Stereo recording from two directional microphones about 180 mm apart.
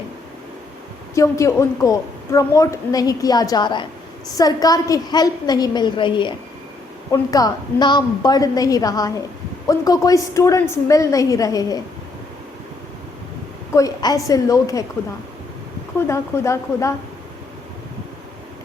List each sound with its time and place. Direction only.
1.1 s a woman's voice: 15° left (ahead or behind)
13.7 s a woman's voice: 20° left (ahead or behind)
16.0 s a woman's voice: 15° left (ahead or behind)